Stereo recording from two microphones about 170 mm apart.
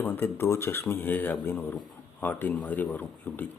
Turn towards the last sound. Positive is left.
turn(degrees=10)  # may be behind; listen again after turning